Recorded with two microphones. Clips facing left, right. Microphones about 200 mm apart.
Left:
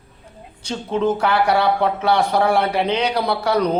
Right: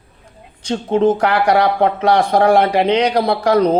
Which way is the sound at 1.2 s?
85° right.